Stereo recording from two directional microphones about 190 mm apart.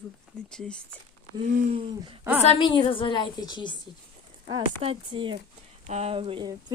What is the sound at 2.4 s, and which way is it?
A woman's voice, 25° left (ahead or behind).